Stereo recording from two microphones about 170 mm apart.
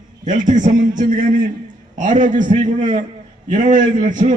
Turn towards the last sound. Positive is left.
turn(degrees=-45)  # may be behind; listen again after turning